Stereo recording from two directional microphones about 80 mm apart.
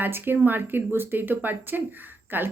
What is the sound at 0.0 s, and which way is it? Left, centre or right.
Speech, right.